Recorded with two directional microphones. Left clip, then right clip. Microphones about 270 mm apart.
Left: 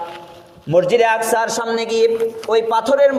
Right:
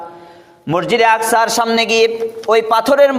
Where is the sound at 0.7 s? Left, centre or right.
Right.